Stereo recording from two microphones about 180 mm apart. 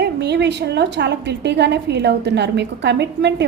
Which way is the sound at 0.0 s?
70° right (ahead or behind).